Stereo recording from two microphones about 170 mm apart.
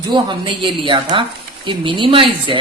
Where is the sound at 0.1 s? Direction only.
30° right (ahead or behind).